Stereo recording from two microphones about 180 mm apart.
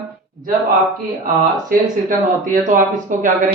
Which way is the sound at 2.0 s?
45° right (ahead or behind).